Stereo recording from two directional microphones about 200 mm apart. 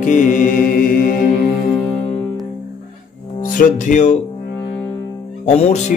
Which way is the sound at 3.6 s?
35° left (ahead or behind).